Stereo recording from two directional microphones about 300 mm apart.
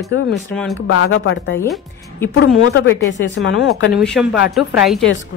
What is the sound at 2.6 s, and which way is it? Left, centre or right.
Speech, left.